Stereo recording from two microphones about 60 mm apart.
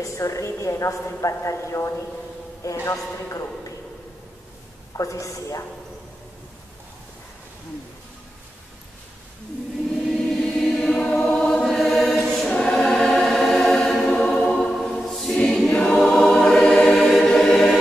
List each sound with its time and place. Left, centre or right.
0.0 s a woman's voice: left
4.9 s a woman's voice: left
10.0 s choir: centre
14.4 s music: centre
14.7 s music: centre
15.7 s choir: left
16.0 s music: centre
17.3 s choir: centre